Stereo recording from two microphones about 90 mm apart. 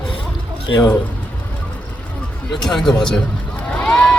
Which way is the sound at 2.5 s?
5° left (ahead or behind).